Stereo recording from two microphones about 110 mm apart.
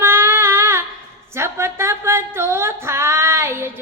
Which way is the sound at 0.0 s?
25° right (ahead or behind).